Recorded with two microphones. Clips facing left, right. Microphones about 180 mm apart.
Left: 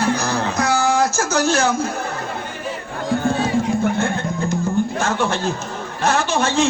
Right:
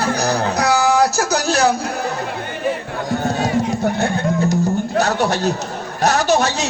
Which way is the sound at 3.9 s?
40° right (ahead or behind).